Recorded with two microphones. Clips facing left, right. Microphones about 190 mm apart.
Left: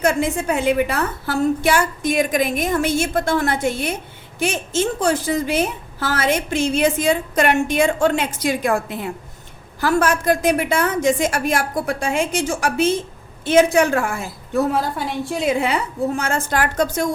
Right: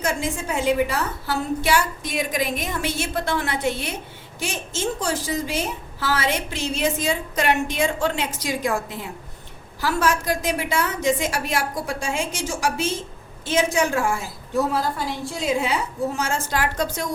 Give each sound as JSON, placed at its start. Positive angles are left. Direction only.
{"t": 0.0, "sound": "a woman's voice", "side_deg": 60}